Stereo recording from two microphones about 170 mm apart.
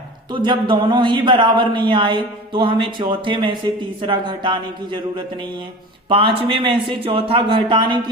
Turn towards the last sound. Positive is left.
turn(degrees=-25)  # may be behind; listen again after turning